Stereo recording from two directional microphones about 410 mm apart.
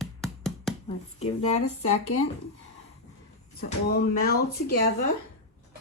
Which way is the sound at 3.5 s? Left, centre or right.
Left.